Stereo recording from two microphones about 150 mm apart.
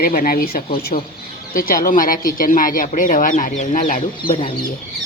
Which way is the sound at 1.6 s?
70° left (ahead or behind).